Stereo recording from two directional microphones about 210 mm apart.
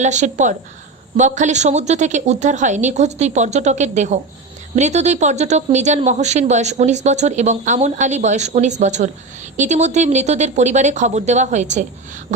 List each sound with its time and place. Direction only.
0.0 s speech: 35° right (ahead or behind)